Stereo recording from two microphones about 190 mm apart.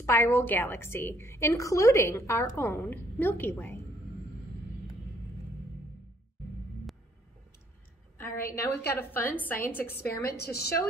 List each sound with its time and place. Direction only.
0.0 s a woman's voice: 15° left (ahead or behind)
8.4 s a woman's voice: 10° left (ahead or behind)
10.0 s a woman's voice: 55° left (ahead or behind)